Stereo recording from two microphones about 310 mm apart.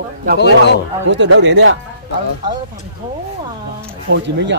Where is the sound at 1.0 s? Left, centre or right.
Right.